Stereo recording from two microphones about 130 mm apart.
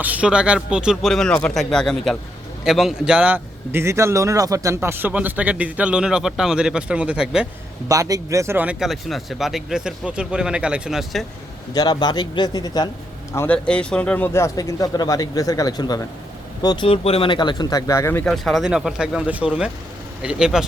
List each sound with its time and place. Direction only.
0.0 s speech: 10° right (ahead or behind)
7.9 s speech: 25° right (ahead or behind)
8.8 s speech: centre (ahead or behind)
11.7 s speech: 30° left (ahead or behind)
13.3 s speech: 20° left (ahead or behind)
16.6 s speech: 40° left (ahead or behind); by 18.3 s 20° left (ahead or behind)
18.3 s speech: centre (ahead or behind)